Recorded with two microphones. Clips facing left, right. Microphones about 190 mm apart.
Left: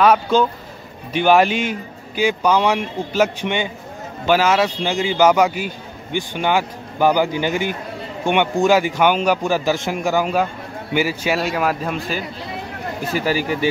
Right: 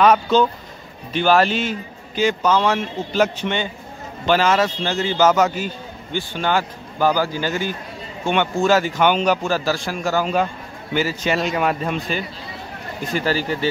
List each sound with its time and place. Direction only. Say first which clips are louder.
0.0 s a man's voice: even; 10° left (ahead or behind)